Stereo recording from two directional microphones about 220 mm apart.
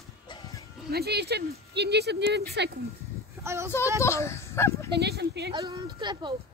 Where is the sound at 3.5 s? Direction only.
10° right (ahead or behind).